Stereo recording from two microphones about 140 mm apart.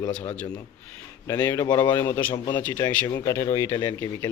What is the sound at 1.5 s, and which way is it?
Speech, 30° left (ahead or behind).